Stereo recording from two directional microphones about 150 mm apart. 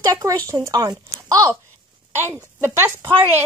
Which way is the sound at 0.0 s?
20° right (ahead or behind).